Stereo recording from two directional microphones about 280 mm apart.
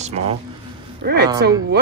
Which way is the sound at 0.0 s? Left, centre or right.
Right.